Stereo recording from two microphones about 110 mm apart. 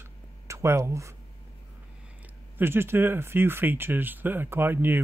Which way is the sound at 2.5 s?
20° right (ahead or behind).